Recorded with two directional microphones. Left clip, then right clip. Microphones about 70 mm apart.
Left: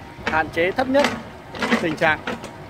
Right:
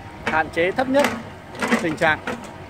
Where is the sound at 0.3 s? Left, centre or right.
Centre.